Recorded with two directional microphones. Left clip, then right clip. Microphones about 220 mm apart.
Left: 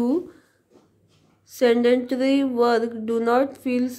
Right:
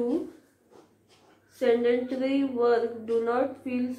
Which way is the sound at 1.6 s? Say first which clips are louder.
Left 5 dB; 50° left (ahead or behind).